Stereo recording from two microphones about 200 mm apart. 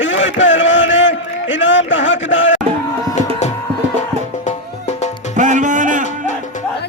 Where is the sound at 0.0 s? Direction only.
70° left (ahead or behind).